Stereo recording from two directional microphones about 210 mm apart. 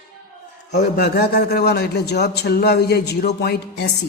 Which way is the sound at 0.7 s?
50° left (ahead or behind).